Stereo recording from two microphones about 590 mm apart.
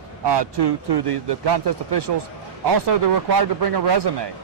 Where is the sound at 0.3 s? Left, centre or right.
Right.